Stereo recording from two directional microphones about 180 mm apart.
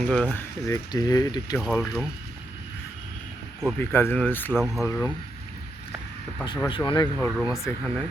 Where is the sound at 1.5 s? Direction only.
5° left (ahead or behind).